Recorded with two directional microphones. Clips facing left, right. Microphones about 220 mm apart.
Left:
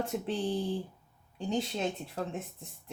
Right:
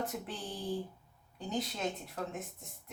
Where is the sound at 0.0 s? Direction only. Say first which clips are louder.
Left 7 dB; 25° left (ahead or behind).